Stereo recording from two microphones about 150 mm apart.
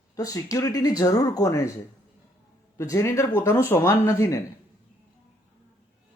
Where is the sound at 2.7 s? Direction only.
20° left (ahead or behind).